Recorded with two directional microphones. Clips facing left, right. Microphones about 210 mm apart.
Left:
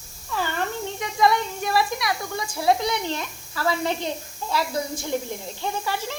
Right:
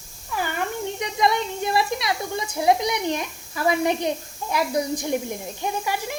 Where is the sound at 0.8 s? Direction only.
20° right (ahead or behind).